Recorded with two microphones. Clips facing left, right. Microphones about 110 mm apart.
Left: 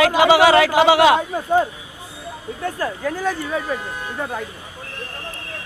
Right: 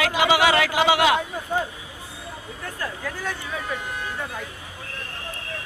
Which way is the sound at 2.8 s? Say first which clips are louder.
Left 6 dB; 40° left (ahead or behind).